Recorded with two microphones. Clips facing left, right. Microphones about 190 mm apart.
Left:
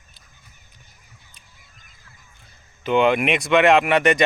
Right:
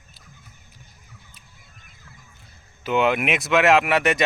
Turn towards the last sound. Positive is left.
turn(degrees=0)  # may be behind; listen again after turning